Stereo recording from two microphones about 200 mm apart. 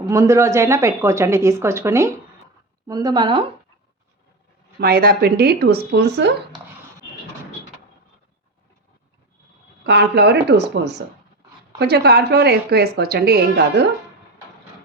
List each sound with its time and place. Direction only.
0.0 s a woman's voice: 15° right (ahead or behind)
4.8 s a woman's voice: 50° right (ahead or behind)
9.8 s a woman's voice: 55° right (ahead or behind)